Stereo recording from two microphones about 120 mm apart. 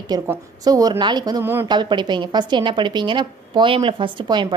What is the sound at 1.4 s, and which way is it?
Speech, 15° right (ahead or behind).